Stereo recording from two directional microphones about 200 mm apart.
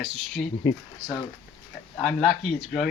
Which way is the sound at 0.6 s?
20° left (ahead or behind).